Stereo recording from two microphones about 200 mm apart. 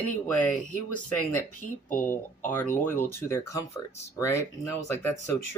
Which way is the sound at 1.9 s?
10° left (ahead or behind).